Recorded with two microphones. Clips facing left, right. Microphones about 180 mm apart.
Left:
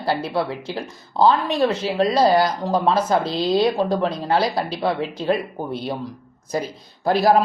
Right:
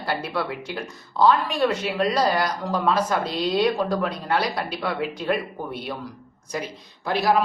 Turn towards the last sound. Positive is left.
turn(degrees=35)  # may be behind; listen again after turning